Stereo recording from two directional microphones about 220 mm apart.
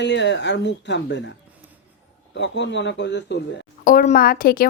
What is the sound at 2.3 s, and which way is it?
Speech, 55° left (ahead or behind).